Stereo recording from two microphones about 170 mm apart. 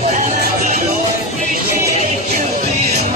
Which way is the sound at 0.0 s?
45° right (ahead or behind).